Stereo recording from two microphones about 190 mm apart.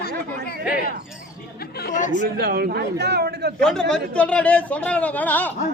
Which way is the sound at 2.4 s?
55° right (ahead or behind).